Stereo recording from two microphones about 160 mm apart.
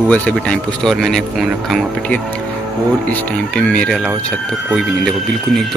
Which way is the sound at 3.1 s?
5° left (ahead or behind).